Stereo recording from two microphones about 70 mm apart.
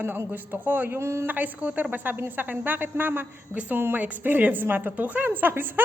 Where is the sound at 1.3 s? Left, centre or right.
Right.